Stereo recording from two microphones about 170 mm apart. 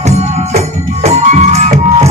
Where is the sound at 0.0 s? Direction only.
40° right (ahead or behind).